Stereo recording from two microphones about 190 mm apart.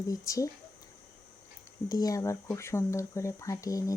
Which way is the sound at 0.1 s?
15° left (ahead or behind).